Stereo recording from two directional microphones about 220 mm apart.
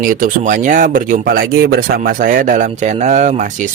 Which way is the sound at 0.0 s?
40° right (ahead or behind).